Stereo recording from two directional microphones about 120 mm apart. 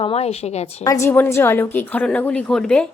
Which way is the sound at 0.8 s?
25° left (ahead or behind).